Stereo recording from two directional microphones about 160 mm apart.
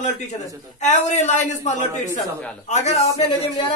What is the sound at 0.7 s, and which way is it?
A man's voice, 50° left (ahead or behind).